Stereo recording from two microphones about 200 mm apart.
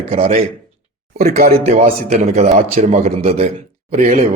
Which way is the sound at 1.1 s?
45° right (ahead or behind).